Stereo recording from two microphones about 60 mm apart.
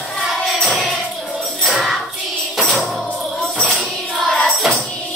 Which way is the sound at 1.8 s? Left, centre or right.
Centre.